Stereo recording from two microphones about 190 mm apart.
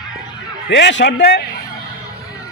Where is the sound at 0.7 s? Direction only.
65° left (ahead or behind).